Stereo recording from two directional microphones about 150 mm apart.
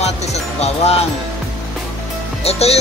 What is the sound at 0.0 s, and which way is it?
Music, 45° left (ahead or behind).